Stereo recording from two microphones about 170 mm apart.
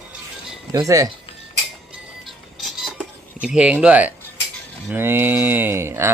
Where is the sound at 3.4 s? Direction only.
5° right (ahead or behind).